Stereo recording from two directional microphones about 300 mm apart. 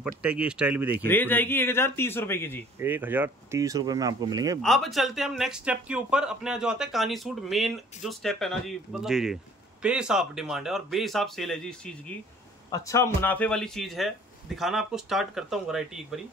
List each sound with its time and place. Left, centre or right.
0.0 s speech: centre
1.0 s speech: centre
2.8 s speech: centre
4.6 s speech: centre